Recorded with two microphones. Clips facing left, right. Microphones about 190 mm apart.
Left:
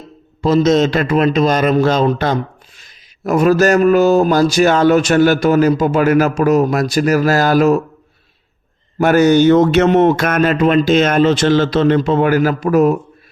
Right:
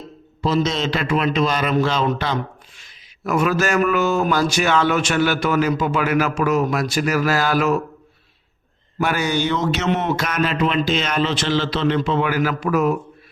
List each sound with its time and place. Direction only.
0.4 s a man's voice: 45° left (ahead or behind)
9.0 s speech: 45° left (ahead or behind)